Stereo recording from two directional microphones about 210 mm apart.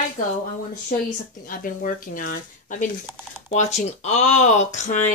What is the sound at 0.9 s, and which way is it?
Speech, 40° left (ahead or behind).